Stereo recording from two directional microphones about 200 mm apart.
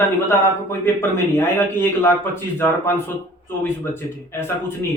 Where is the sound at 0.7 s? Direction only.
10° left (ahead or behind).